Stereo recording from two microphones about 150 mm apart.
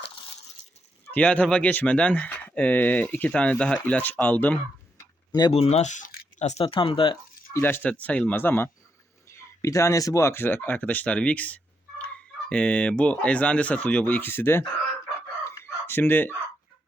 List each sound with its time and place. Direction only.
1.1 s speech: 10° left (ahead or behind)
5.5 s speech: 45° left (ahead or behind)
6.4 s speech: 45° left (ahead or behind)
7.5 s speech: 15° left (ahead or behind)
15.4 s fowl: 15° left (ahead or behind)